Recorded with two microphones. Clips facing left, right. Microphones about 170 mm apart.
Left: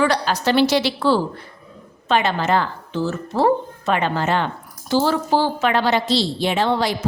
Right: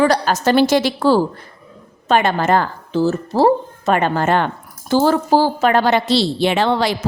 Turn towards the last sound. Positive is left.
turn(degrees=-75)  # may be behind; listen again after turning